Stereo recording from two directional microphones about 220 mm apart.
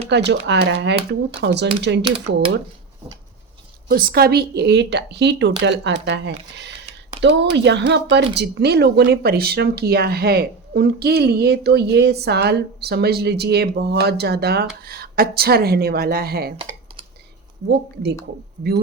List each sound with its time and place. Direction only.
0.1 s speech: 50° right (ahead or behind)
3.8 s speech: 45° right (ahead or behind)
7.5 s speech: 50° right (ahead or behind)
17.7 s speech: 50° right (ahead or behind)